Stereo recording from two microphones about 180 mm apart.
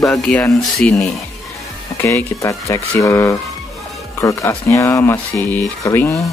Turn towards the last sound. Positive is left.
turn(degrees=15)  # may be behind; listen again after turning